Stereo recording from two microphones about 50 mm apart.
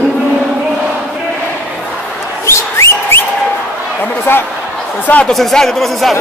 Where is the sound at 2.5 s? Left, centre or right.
Left.